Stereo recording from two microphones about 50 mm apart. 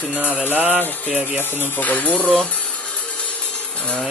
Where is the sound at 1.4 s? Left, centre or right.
Left.